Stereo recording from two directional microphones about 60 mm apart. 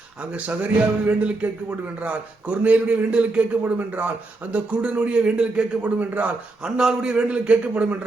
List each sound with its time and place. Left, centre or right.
0.3 s speech: right
4.5 s a man's voice: centre